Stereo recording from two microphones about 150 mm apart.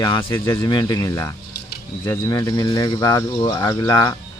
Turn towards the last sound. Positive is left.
turn(degrees=25)  # may be behind; listen again after turning